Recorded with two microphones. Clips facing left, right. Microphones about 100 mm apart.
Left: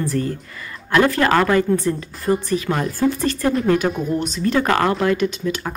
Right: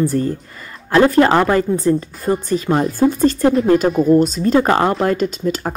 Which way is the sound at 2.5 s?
30° right (ahead or behind).